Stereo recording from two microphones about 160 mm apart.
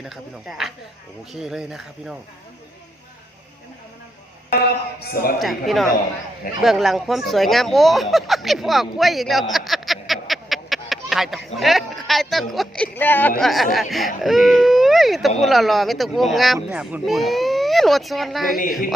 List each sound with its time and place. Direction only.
0.0 s speech: centre (ahead or behind)
4.5 s a man's voice: 80° left
5.4 s speech: centre (ahead or behind)
13.4 s speech: centre (ahead or behind)